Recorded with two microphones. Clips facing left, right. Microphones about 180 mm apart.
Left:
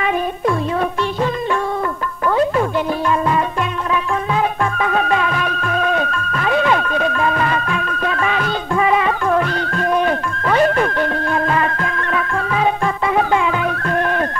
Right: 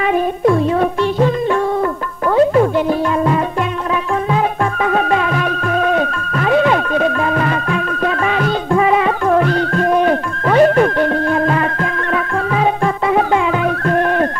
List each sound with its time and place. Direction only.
0.1 s music: 35° right (ahead or behind)
4.3 s music: 40° right (ahead or behind)